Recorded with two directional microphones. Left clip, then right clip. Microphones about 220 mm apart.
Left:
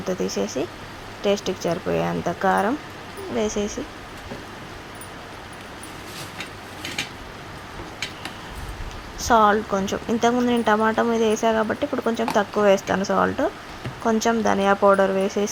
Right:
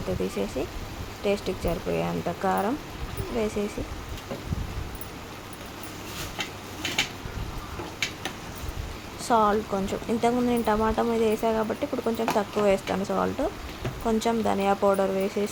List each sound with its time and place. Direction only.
1.2 s speech: 15° left (ahead or behind)
9.2 s speech: 15° left (ahead or behind)